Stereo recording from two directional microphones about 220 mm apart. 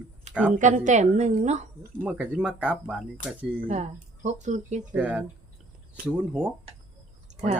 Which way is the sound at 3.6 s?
30° right (ahead or behind).